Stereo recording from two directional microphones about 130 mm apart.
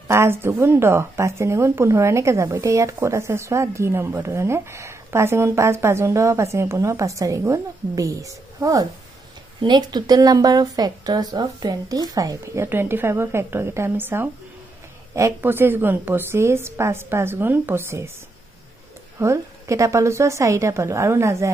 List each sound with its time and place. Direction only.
0.1 s a woman's voice: 20° right (ahead or behind)
19.1 s speech: 20° right (ahead or behind)